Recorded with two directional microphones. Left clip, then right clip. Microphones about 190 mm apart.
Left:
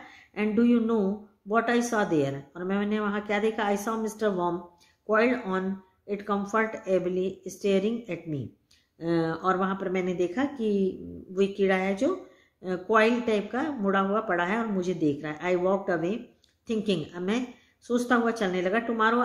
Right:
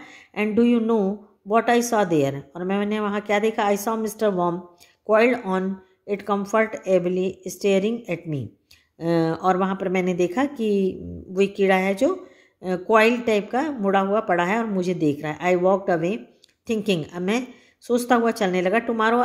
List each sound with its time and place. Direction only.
0.0 s speech: 40° right (ahead or behind)